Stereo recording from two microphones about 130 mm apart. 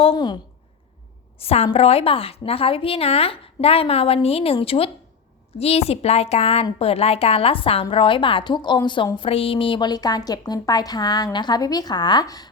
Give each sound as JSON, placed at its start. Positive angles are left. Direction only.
{"t": 0.0, "sound": "a woman's voice", "side_deg": 40}
{"t": 1.4, "sound": "a woman's voice", "side_deg": 50}